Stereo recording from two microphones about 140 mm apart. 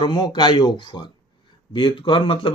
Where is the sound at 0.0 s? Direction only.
35° left (ahead or behind).